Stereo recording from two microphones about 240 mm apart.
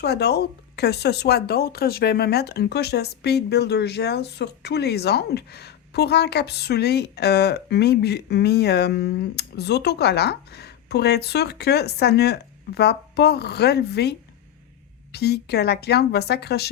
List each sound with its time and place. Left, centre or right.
0.0 s speech: left